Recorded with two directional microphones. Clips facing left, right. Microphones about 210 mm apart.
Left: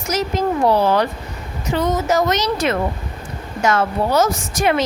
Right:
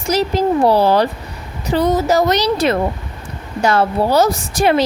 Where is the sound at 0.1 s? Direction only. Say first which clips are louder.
Right 4 dB; 35° right (ahead or behind).